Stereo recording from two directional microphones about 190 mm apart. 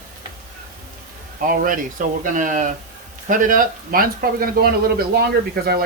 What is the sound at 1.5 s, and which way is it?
Speech, 45° right (ahead or behind).